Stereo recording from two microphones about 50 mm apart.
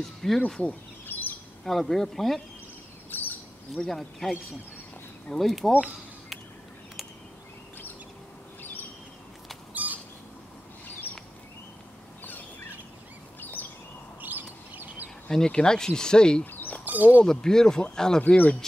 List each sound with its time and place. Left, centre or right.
0.0 s speech: centre
1.0 s bird: left
1.6 s speech: centre
3.1 s bird: left
3.7 s speech: centre
9.8 s bird: right
11.1 s a sound: left
12.2 s bird: left
14.2 s bird: right
15.2 s speech: centre
16.8 s speech: right
17.2 s speech: centre
18.2 s speech: left